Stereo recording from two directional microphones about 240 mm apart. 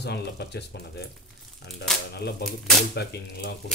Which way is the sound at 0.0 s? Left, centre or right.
Left.